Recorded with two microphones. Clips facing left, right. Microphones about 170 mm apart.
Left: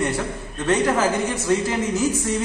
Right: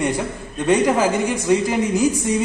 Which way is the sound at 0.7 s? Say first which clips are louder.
Right 3 dB; 10° right (ahead or behind).